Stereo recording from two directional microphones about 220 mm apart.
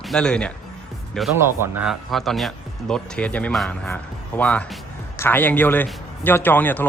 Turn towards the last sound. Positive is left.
turn(degrees=10)  # may be behind; listen again after turning